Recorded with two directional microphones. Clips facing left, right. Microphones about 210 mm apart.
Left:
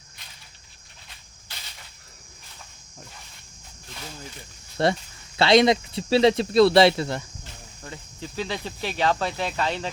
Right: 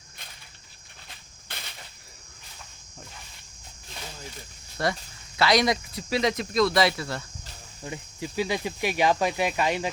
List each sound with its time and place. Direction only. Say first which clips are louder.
1.5 s a sound: right 3 dB; 55° right (ahead or behind)
4.8 s speech: left 5 dB; 25° left (ahead or behind)
7.8 s speech: right 4 dB; 10° right (ahead or behind)